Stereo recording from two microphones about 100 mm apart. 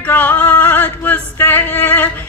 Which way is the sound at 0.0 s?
15° left (ahead or behind).